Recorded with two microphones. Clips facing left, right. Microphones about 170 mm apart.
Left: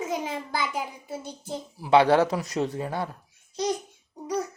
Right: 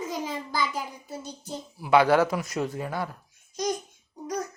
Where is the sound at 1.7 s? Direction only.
35° left (ahead or behind).